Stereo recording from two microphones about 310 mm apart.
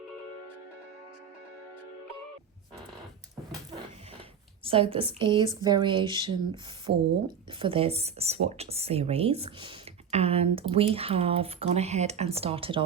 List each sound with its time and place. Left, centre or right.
4.6 s a woman's voice: centre
6.9 s speech: right
7.6 s speech: centre